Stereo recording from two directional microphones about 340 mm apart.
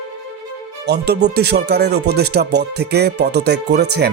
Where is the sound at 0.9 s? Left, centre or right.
Right.